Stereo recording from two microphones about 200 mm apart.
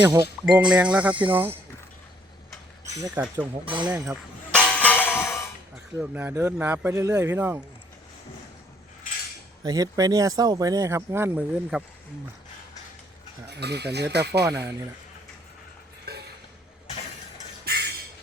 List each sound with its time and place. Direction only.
0.0 s speech: 15° right (ahead or behind)
3.2 s speech: 5° right (ahead or behind)
4.5 s music: 5° left (ahead or behind)
6.0 s speech: 10° right (ahead or behind)
9.6 s speech: 20° right (ahead or behind)
13.5 s speech: 55° right (ahead or behind)
16.1 s a sound: 50° right (ahead or behind)
17.7 s music: 55° right (ahead or behind)